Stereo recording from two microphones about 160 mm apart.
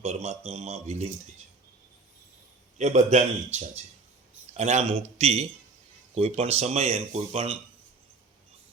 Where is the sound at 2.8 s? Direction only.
50° right (ahead or behind).